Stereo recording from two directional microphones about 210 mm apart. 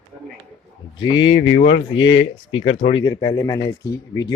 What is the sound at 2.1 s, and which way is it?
Speech, 25° left (ahead or behind).